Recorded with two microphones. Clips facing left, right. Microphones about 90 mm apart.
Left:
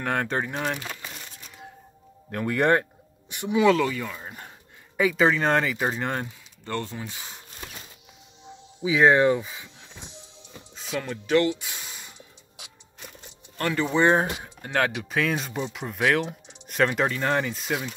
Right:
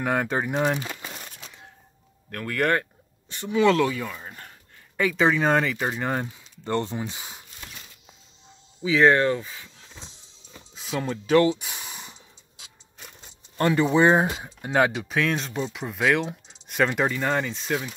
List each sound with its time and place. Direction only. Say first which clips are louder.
0.0 s speech: right 2 dB; 5° right (ahead or behind)
2.3 s speech: left 2 dB; 20° left (ahead or behind)
3.6 s speech: right 1 dB; centre (ahead or behind)
6.6 s speech: right 5 dB; 20° right (ahead or behind)
8.8 s speech: even; 15° left (ahead or behind)
9.9 s music: left 4 dB; 65° left (ahead or behind)
11.4 s a sound: right 3 dB; 20° right (ahead or behind)
13.6 s speech: right 3 dB; 20° right (ahead or behind)
15.0 s speech: right 1 dB; centre (ahead or behind)